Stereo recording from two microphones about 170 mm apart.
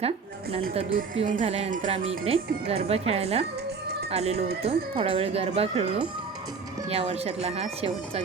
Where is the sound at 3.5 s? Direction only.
75° right (ahead or behind).